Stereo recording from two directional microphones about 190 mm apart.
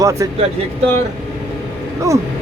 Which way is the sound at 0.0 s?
15° right (ahead or behind).